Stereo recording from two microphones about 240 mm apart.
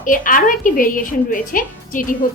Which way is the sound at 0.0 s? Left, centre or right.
Left.